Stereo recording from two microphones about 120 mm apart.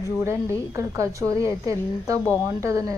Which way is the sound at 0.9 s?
25° right (ahead or behind).